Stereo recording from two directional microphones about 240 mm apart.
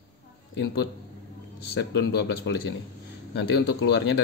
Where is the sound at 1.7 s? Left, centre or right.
Left.